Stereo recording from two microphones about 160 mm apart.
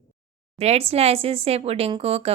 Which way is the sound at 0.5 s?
40° right (ahead or behind).